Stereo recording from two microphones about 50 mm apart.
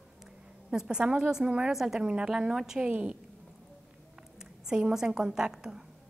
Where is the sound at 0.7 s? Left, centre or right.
Centre.